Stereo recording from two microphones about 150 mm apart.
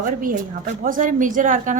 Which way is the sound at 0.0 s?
65° right (ahead or behind).